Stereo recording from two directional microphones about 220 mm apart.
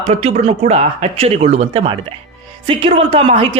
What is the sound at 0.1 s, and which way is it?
Speech, 25° right (ahead or behind).